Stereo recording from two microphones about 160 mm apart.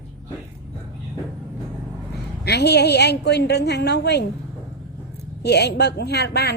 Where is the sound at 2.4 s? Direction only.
90° left.